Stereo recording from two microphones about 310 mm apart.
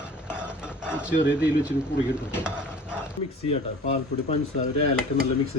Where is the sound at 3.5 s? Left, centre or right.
Centre.